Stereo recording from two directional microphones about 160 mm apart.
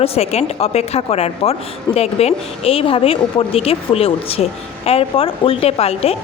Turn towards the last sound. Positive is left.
turn(degrees=40)  # may be behind; listen again after turning